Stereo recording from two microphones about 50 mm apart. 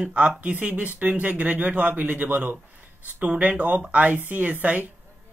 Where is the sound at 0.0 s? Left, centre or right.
Right.